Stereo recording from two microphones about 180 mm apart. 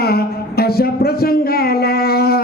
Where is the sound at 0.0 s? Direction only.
60° left (ahead or behind).